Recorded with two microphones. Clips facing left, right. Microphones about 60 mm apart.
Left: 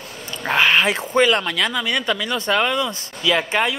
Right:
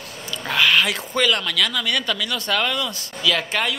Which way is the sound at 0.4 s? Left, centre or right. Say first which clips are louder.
Left 2 dB; left.